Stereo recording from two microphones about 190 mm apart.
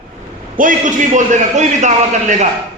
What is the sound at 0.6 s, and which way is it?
A man's voice, 45° right (ahead or behind).